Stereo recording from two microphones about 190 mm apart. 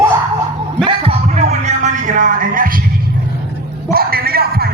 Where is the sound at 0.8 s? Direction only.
30° right (ahead or behind); by 2.8 s 45° right (ahead or behind).